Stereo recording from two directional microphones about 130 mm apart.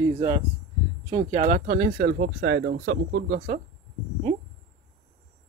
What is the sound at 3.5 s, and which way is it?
Speech, 65° right (ahead or behind).